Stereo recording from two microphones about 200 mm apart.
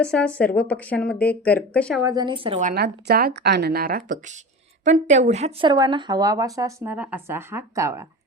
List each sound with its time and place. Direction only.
0.0 s speech: 5° left (ahead or behind)
2.0 s speech: 20° right (ahead or behind)
2.6 s speech: 40° right (ahead or behind)
2.8 s speech: 50° right (ahead or behind); by 8.0 s 15° right (ahead or behind)